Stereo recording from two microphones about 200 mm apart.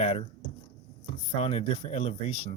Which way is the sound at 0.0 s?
30° left (ahead or behind).